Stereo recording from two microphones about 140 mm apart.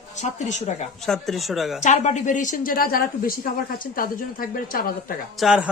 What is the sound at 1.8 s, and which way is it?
A woman's voice, 60° left (ahead or behind).